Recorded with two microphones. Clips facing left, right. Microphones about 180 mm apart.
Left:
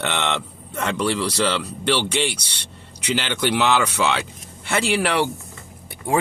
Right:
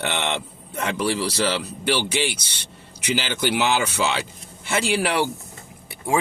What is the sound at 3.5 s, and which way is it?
A man's voice, 60° left (ahead or behind).